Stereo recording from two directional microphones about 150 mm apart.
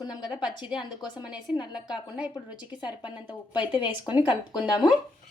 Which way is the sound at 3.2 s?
30° left (ahead or behind).